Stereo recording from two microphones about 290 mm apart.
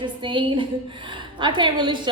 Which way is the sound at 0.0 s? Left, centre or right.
Centre.